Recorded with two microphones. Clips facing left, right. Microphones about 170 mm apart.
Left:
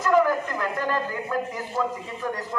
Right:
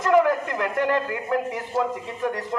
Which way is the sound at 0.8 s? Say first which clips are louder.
Right 4 dB; 20° right (ahead or behind).